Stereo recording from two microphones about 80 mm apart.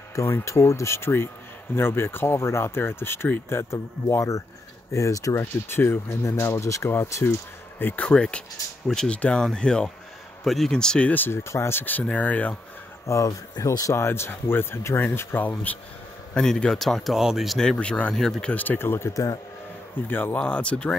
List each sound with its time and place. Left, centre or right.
0.1 s speech: left
7.8 s speech: centre
13.0 s speech: left
16.3 s speech: centre
17.6 s speech: centre
18.5 s speech: left